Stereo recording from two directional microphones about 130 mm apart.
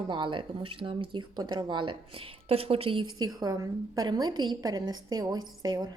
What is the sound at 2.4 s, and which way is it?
A woman's voice, 50° right (ahead or behind).